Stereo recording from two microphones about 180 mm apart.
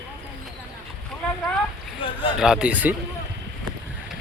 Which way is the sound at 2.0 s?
30° left (ahead or behind).